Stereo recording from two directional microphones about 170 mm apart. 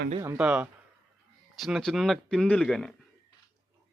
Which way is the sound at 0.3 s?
5° right (ahead or behind).